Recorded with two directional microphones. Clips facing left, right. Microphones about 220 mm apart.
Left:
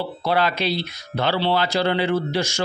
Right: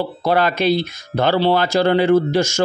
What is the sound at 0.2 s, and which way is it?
Speech, 45° right (ahead or behind).